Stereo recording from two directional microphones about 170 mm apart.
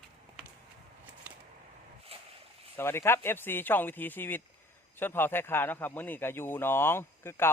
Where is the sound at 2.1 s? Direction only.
35° right (ahead or behind).